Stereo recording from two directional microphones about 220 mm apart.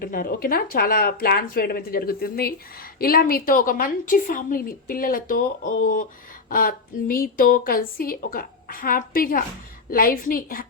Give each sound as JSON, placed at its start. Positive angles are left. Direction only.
{"t": 0.0, "sound": "speech", "side_deg": 40}